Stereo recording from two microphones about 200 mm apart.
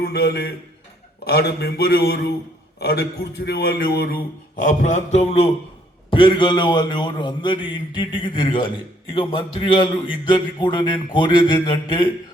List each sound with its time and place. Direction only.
0.0 s a man's voice: 50° left (ahead or behind); by 12.0 s 25° left (ahead or behind)